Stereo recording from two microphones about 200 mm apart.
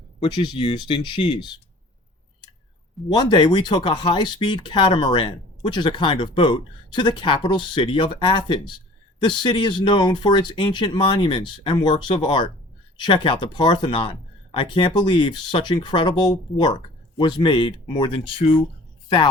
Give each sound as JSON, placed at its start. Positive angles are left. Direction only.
{"t": 0.2, "sound": "speech", "side_deg": 25}
{"t": 3.2, "sound": "speech", "side_deg": 20}